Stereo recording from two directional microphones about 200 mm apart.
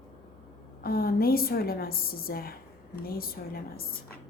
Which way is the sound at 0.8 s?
50° left (ahead or behind).